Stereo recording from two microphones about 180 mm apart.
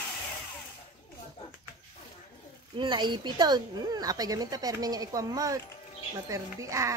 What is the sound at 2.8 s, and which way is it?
Speech, 25° right (ahead or behind).